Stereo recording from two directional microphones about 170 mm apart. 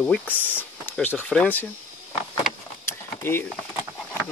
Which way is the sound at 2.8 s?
15° left (ahead or behind).